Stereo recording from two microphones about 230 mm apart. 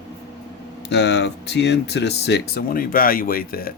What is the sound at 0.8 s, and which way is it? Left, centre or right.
Speech, left.